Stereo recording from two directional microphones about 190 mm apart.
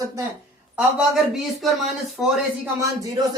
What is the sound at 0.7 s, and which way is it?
A man's voice, 5° right (ahead or behind).